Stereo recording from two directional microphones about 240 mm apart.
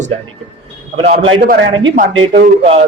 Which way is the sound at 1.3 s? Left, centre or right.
Right.